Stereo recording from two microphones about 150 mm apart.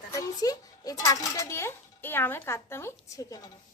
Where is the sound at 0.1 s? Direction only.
25° left (ahead or behind).